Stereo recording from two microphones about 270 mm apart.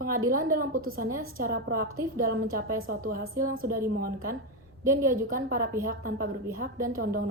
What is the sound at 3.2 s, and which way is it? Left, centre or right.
Speech, right.